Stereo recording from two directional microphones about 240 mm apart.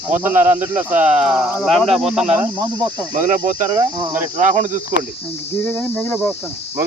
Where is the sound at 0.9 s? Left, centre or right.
Right.